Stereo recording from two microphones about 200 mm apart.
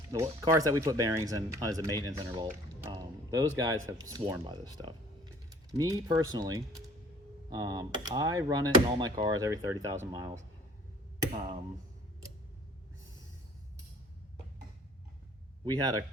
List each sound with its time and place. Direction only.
0.1 s speech: 15° right (ahead or behind)
15.6 s speech: 20° right (ahead or behind)